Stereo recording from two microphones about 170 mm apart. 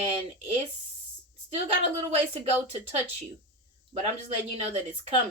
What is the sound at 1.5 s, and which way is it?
Speech, 40° right (ahead or behind).